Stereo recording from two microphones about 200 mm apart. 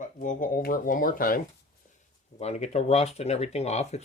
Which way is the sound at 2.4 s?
35° left (ahead or behind).